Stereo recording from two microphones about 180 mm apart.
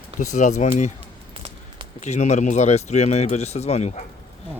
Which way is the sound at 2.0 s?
40° left (ahead or behind).